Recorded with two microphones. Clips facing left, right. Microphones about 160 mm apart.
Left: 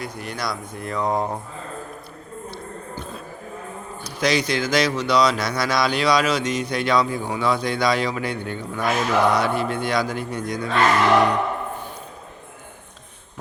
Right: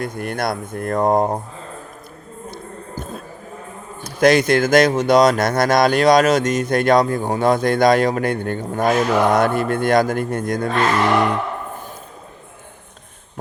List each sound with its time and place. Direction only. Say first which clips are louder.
0.0 s speech: right 6 dB; 50° right (ahead or behind)
2.5 s music: right 3 dB; 45° right (ahead or behind)
4.0 s speech: right 8 dB; 50° right (ahead or behind)